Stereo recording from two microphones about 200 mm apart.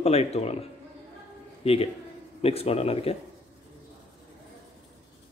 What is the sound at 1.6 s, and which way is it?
Speech, 30° left (ahead or behind).